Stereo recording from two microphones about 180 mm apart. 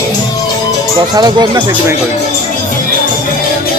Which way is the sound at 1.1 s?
25° right (ahead or behind).